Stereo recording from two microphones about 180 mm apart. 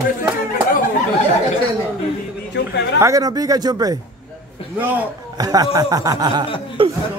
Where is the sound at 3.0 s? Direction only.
20° right (ahead or behind).